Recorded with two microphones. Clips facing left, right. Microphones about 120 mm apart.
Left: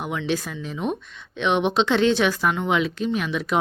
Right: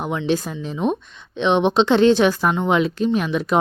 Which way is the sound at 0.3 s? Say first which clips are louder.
Right 4 dB; 30° right (ahead or behind).